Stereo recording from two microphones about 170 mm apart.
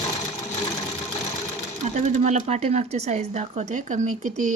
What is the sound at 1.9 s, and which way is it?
Speech, 45° right (ahead or behind).